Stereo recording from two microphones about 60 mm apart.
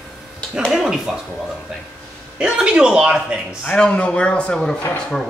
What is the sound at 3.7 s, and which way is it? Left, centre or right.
A man's voice, centre.